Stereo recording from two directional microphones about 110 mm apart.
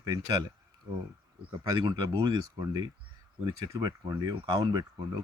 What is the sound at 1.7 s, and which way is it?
Speech, 40° right (ahead or behind).